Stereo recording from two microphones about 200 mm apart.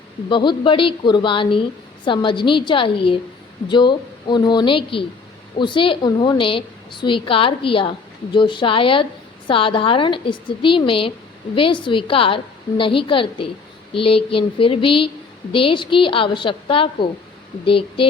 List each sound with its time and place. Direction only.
0.3 s a woman's voice: 25° left (ahead or behind)